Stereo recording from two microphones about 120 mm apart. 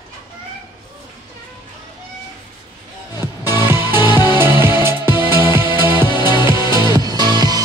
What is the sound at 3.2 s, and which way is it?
Music, 35° left (ahead or behind).